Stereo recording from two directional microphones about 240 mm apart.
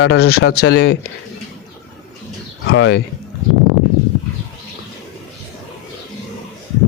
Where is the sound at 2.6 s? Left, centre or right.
Left.